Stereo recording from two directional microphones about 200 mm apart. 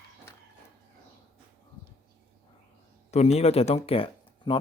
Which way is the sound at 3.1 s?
35° left (ahead or behind).